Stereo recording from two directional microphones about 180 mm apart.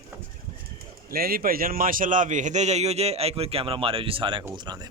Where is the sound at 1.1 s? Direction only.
55° right (ahead or behind); by 4.8 s 20° right (ahead or behind).